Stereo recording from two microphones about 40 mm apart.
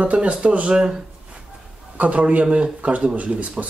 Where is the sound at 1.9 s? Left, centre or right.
Right.